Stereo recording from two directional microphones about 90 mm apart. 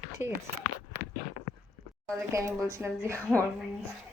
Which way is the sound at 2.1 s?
35° right (ahead or behind).